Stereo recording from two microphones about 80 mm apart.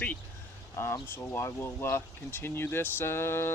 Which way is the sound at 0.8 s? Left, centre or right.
Left.